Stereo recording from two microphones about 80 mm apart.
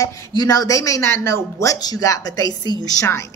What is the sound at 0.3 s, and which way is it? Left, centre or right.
Speech, left.